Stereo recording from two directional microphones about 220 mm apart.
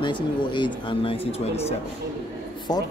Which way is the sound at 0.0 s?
20° left (ahead or behind).